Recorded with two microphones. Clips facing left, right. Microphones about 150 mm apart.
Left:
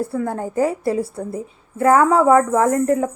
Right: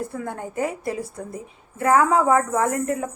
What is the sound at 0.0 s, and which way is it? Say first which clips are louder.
A woman's voice: left 7 dB; 30° left (ahead or behind).